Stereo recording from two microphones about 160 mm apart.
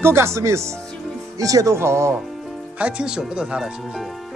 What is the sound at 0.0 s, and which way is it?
Speech, 15° right (ahead or behind).